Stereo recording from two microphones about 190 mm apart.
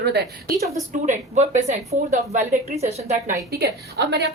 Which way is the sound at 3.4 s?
60° right (ahead or behind).